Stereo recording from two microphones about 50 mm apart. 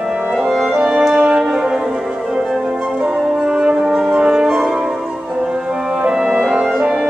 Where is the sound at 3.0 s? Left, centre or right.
Centre.